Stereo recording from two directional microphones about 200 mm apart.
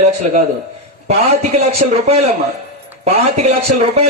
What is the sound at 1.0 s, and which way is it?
Speech, 30° right (ahead or behind).